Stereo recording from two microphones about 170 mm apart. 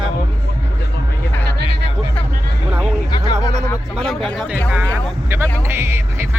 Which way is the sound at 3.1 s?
25° left (ahead or behind).